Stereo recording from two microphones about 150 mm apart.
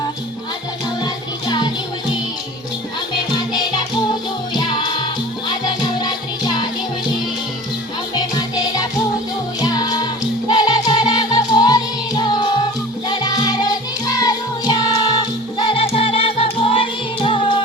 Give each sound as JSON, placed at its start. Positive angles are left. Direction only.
{"t": 1.0, "sound": "music", "side_deg": 30}
{"t": 3.3, "sound": "music", "side_deg": 30}
{"t": 8.1, "sound": "music", "side_deg": 30}